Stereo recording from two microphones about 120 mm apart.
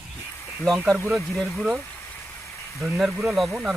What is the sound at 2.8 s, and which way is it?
Speech, 5° right (ahead or behind).